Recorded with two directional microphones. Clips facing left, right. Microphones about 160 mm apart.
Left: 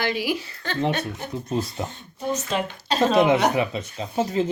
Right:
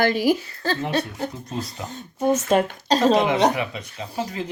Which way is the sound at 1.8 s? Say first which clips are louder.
Left 3 dB; 35° left (ahead or behind).